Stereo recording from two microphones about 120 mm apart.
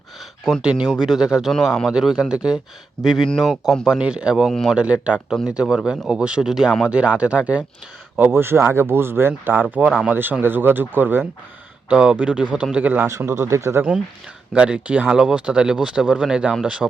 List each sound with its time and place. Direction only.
0.6 s speech: 10° right (ahead or behind); by 13.8 s 25° right (ahead or behind)
14.5 s speech: 10° right (ahead or behind)